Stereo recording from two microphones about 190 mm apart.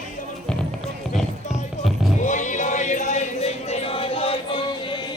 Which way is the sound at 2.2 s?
40° left (ahead or behind).